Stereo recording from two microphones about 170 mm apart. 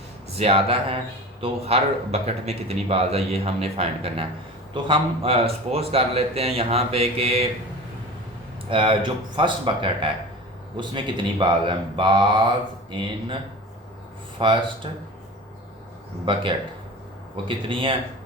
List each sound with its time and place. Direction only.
0.3 s a man's voice: 35° right (ahead or behind)
8.7 s speech: 30° right (ahead or behind)
14.3 s a man's voice: 30° right (ahead or behind)
16.2 s speech: 30° right (ahead or behind)
17.7 s speech: 30° right (ahead or behind)